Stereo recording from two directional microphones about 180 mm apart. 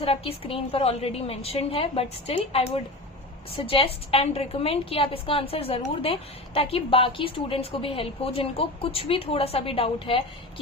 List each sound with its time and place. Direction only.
0.0 s a woman's voice: 30° left (ahead or behind)